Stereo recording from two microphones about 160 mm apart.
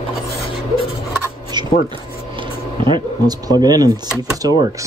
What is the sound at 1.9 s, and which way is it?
Speech, 30° right (ahead or behind).